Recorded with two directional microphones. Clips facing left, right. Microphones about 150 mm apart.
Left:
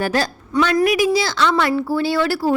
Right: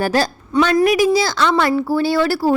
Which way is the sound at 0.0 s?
35° right (ahead or behind).